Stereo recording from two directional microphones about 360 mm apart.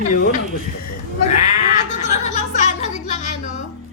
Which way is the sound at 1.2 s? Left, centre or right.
Centre.